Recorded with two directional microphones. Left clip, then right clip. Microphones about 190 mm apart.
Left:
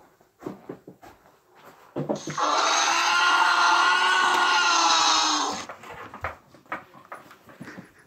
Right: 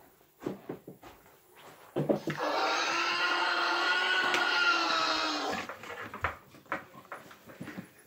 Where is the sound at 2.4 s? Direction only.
55° left (ahead or behind).